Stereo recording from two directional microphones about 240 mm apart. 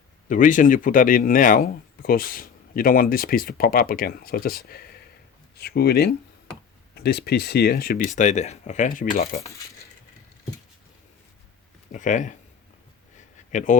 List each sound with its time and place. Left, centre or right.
0.3 s speech: left
11.9 s speech: left
13.1 s a sound: left